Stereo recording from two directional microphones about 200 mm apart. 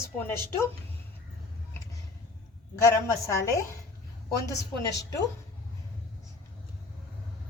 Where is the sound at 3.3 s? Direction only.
15° left (ahead or behind).